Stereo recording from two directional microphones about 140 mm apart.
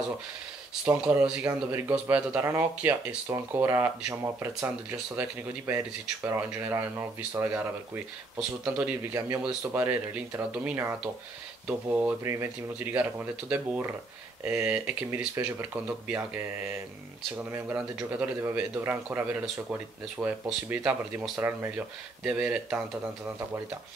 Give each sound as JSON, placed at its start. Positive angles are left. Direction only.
{"t": 0.8, "sound": "speech", "side_deg": -10}
{"t": 17.4, "sound": "speech", "side_deg": -15}